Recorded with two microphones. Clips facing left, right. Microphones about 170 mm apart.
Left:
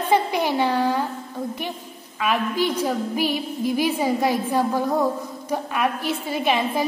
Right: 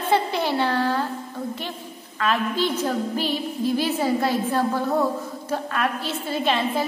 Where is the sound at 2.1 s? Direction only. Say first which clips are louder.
Left 1 dB; 15° left (ahead or behind).